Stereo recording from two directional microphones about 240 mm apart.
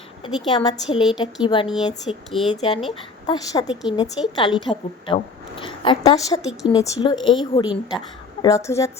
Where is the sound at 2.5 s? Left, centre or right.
Left.